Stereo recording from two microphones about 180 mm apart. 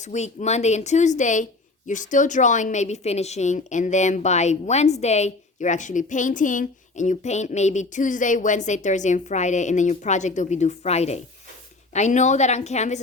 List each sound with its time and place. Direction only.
0.0 s a woman's voice: 40° left (ahead or behind)